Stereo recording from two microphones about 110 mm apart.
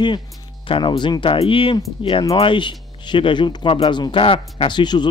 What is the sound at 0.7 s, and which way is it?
Speech, 50° left (ahead or behind).